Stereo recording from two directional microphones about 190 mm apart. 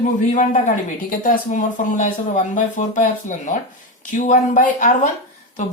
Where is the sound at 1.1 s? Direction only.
45° left (ahead or behind).